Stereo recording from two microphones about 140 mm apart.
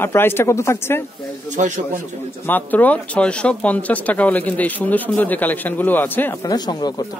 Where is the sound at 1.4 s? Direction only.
60° right (ahead or behind).